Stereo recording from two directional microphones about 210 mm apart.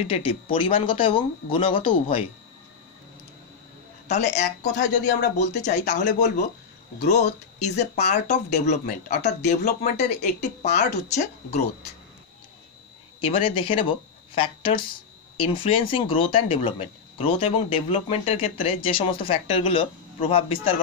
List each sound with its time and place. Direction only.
0.1 s speech: 25° left (ahead or behind)
4.1 s speech: 35° left (ahead or behind)
13.2 s speech: 25° left (ahead or behind)